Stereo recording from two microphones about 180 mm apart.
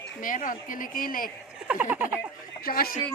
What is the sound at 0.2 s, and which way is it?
Speech, 50° left (ahead or behind).